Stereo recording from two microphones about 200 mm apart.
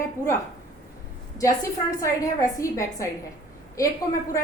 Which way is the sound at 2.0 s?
15° left (ahead or behind).